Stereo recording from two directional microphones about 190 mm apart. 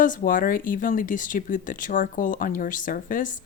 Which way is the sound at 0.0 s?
45° left (ahead or behind).